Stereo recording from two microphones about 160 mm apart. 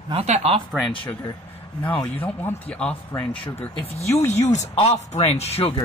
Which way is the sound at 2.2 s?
10° left (ahead or behind).